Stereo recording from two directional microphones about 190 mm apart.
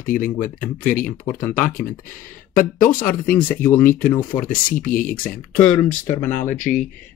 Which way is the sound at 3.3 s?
10° left (ahead or behind).